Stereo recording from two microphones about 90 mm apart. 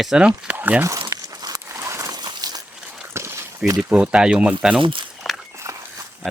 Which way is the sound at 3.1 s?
30° right (ahead or behind).